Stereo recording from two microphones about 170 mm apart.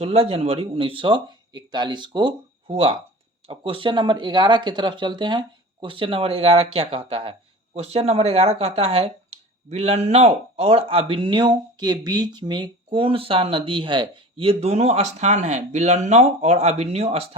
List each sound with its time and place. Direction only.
0.0 s speech: 35° right (ahead or behind)